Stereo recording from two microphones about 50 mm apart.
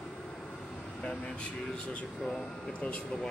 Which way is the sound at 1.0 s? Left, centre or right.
Centre.